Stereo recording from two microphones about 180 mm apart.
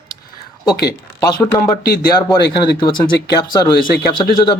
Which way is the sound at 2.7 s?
25° left (ahead or behind).